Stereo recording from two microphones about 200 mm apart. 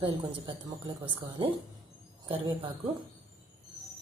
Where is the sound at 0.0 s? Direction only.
25° right (ahead or behind).